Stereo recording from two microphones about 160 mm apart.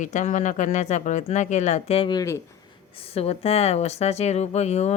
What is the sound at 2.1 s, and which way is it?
Speech, 20° left (ahead or behind).